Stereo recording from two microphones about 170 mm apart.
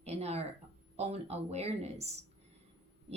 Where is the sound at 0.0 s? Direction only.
40° right (ahead or behind).